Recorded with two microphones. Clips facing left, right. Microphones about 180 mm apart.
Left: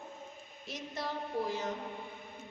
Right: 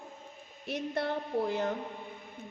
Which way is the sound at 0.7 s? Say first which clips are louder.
Right 7 dB; 60° right (ahead or behind).